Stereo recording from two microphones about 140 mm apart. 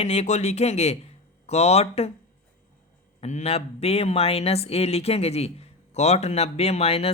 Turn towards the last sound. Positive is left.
turn(degrees=45)  # may be behind; listen again after turning